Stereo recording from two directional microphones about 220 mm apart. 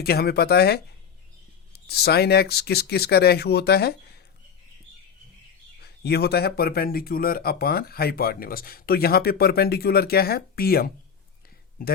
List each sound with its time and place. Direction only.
0.0 s speech: 45° left (ahead or behind)
1.9 s speech: 45° left (ahead or behind)
5.8 s speech: 45° left (ahead or behind)